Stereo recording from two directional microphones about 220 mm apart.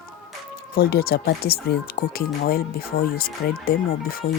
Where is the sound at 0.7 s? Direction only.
45° left (ahead or behind).